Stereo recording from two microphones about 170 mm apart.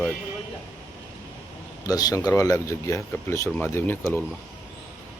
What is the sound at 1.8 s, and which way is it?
Speech, 20° left (ahead or behind).